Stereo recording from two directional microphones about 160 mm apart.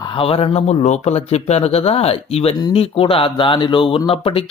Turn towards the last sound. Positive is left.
turn(degrees=35)  # may be behind; listen again after turning